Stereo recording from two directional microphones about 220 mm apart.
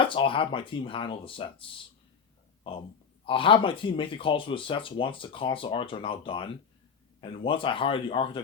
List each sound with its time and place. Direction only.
0.0 s speech: 25° left (ahead or behind)
3.2 s speech: 25° left (ahead or behind)